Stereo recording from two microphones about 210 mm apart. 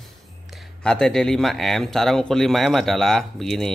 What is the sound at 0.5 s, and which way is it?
Speech, centre (ahead or behind).